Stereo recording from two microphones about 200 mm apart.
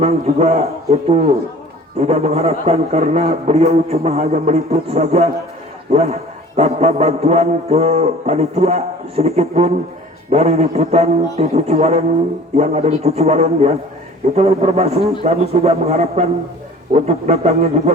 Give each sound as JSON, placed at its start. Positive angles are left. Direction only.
{"t": 0.0, "sound": "a man's voice", "side_deg": -30}